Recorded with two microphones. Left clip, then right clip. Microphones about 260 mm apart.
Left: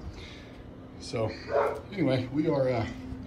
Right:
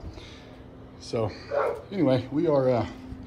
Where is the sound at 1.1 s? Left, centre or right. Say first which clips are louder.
Right 1 dB; centre.